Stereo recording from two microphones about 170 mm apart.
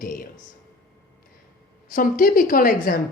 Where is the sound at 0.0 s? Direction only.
55° left (ahead or behind).